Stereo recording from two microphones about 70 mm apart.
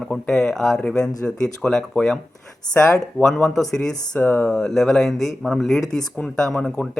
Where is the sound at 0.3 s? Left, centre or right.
Centre.